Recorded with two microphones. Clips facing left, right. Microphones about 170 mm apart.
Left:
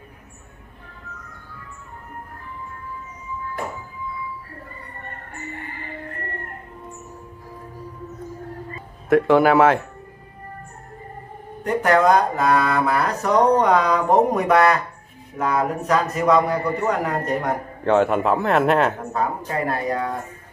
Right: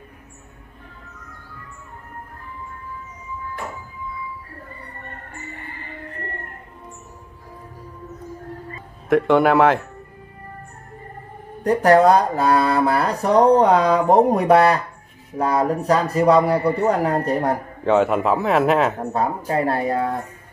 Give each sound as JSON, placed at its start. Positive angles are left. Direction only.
{"t": 9.1, "sound": "a man's voice", "side_deg": 0}
{"t": 11.6, "sound": "speech", "side_deg": -35}
{"t": 17.8, "sound": "a man's voice", "side_deg": 0}
{"t": 18.9, "sound": "speech", "side_deg": -30}